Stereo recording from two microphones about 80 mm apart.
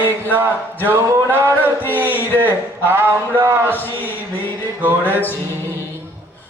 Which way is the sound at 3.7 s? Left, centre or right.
Left.